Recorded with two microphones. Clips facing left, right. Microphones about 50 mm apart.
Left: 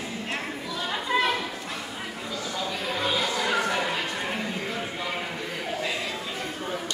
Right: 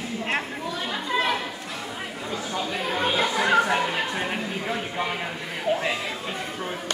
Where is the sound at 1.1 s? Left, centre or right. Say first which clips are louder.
Left 1 dB; centre.